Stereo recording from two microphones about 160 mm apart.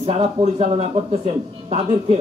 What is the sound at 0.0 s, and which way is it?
A man's voice, 40° right (ahead or behind).